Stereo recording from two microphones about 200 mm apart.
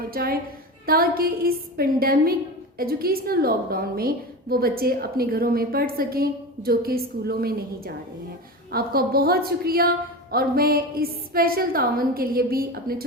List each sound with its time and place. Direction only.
0.1 s a woman's voice: 50° right (ahead or behind)